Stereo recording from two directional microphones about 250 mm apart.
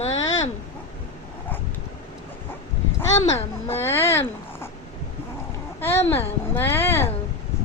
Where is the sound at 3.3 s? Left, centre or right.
Centre.